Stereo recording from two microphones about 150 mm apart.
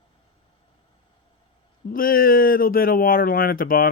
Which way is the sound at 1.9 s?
70° left (ahead or behind).